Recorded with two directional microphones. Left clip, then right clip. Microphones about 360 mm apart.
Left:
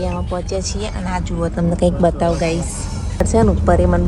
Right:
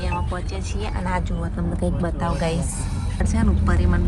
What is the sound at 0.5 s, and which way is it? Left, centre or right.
Vehicle, centre.